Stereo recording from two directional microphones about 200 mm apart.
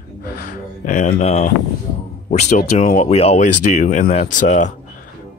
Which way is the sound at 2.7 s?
40° left (ahead or behind).